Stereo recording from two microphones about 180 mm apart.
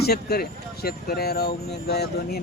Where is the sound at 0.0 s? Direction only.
60° left (ahead or behind).